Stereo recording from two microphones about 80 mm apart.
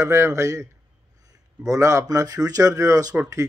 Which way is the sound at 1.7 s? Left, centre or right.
Right.